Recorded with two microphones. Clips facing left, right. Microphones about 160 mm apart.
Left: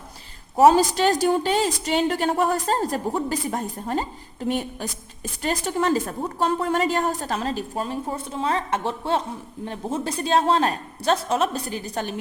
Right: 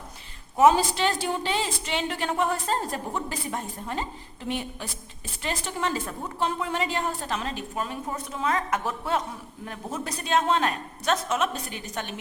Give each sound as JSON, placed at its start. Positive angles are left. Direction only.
{"t": 0.5, "sound": "a woman's voice", "side_deg": 40}